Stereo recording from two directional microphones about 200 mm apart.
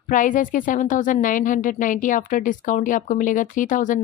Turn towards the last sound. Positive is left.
turn(degrees=40)  # may be behind; listen again after turning